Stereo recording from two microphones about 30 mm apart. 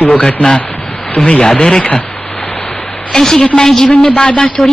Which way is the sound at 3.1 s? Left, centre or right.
Centre.